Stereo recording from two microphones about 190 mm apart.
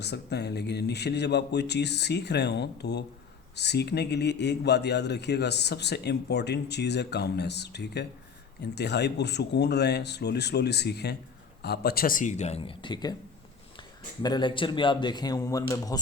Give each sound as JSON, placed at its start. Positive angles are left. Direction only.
{"t": 0.0, "sound": "speech", "side_deg": 60}